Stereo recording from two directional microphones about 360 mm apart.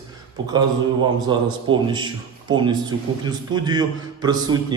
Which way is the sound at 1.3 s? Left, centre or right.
Centre.